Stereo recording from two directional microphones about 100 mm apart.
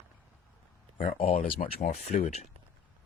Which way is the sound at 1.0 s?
70° left (ahead or behind).